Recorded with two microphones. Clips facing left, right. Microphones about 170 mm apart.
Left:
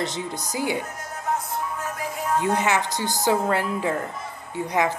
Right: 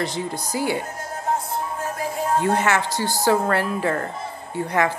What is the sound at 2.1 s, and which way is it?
Music, 30° right (ahead or behind).